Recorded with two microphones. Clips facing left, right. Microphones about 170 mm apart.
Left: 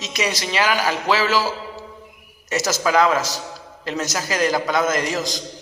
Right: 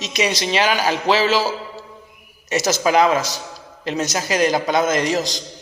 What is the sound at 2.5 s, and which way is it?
A man's voice, 15° right (ahead or behind).